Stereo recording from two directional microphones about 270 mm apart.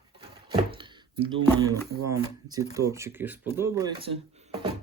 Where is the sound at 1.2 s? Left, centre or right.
Right.